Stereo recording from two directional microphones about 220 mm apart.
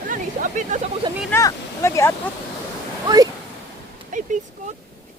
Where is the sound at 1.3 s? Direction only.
15° left (ahead or behind).